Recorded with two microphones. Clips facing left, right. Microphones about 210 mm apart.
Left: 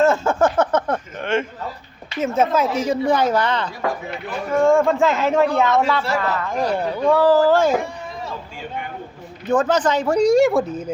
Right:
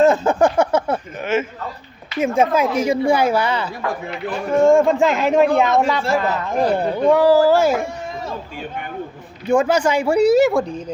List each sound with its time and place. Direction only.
0.0 s a sound: 15° right (ahead or behind)
2.2 s speech: 10° right (ahead or behind)
9.5 s speech: 10° right (ahead or behind); by 10.9 s 5° left (ahead or behind)